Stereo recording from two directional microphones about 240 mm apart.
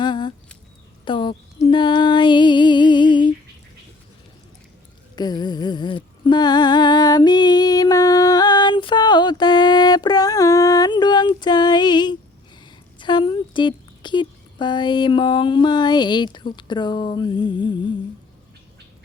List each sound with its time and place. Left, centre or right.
0.0 s a sound: centre
1.0 s speech: centre
1.6 s female singing: centre
5.1 s music: centre
13.0 s speech: centre